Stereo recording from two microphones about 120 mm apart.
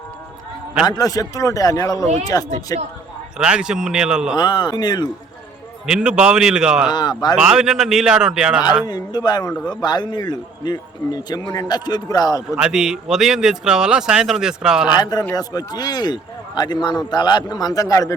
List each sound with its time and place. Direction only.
0.9 s a man's voice: 30° left (ahead or behind)
3.3 s speech: 5° right (ahead or behind)
4.4 s a man's voice: 35° left (ahead or behind)
5.8 s a man's voice: 5° right (ahead or behind)
6.9 s a man's voice: 35° left (ahead or behind)
7.3 s speech: 5° right (ahead or behind)
8.9 s a man's voice: 35° left (ahead or behind)
12.5 s speech: 5° right (ahead or behind)
14.8 s a man's voice: 35° left (ahead or behind)